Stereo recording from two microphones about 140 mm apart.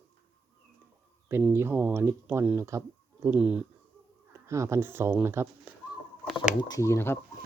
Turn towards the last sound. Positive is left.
turn(degrees=15)  # may be behind; listen again after turning